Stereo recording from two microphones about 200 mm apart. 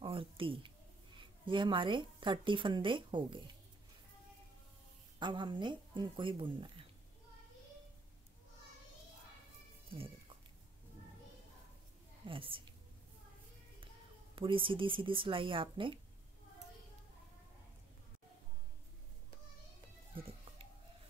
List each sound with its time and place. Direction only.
0.0 s a sound: 25° right (ahead or behind)
1.4 s a woman's voice: 25° right (ahead or behind)
5.2 s a woman's voice: 25° right (ahead or behind)
12.3 s a woman's voice: 25° right (ahead or behind)
14.3 s a woman's voice: 25° right (ahead or behind)